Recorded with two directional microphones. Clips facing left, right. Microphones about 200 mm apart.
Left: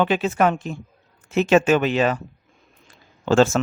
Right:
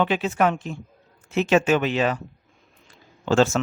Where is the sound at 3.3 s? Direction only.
45° left (ahead or behind).